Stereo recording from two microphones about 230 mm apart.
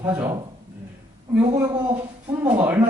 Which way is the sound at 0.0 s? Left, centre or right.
Centre.